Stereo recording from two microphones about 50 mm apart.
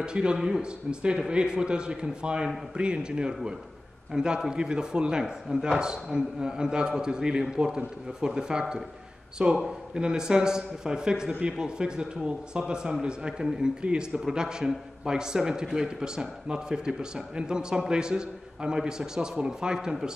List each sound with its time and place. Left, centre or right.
0.0 s a man's voice: centre